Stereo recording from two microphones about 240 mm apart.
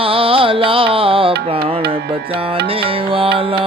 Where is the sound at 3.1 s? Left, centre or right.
Right.